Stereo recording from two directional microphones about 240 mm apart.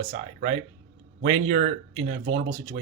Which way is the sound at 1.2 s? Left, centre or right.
Right.